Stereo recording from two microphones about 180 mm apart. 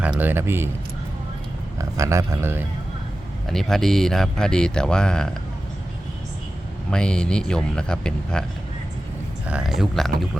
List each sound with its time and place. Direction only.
0.0 s speech: 10° right (ahead or behind)
1.8 s speech: 15° right (ahead or behind)
3.5 s speech: centre (ahead or behind)
6.9 s speech: 5° left (ahead or behind)
9.5 s speech: 5° right (ahead or behind)